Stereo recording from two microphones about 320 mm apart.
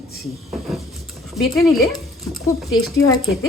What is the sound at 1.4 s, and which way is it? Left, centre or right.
Speech, centre.